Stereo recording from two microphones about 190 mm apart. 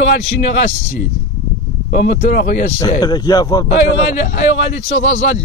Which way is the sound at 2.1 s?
45° left (ahead or behind).